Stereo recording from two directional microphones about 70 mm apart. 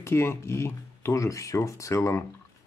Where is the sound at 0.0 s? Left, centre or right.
Left.